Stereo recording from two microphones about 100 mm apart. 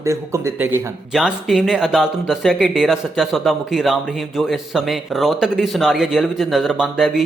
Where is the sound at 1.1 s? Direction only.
5° right (ahead or behind).